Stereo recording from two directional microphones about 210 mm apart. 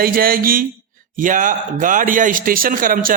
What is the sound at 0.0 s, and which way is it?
A man's voice, 45° right (ahead or behind).